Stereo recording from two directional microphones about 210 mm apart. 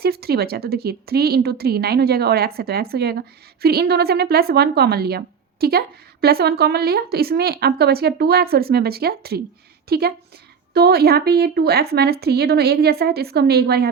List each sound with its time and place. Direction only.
0.0 s a woman's voice: 50° right (ahead or behind)